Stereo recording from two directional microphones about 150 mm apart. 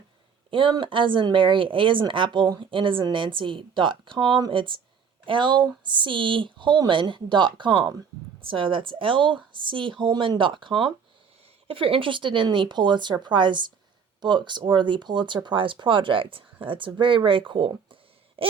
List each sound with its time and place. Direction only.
0.5 s speech: 35° right (ahead or behind)
18.4 s owl: 35° right (ahead or behind)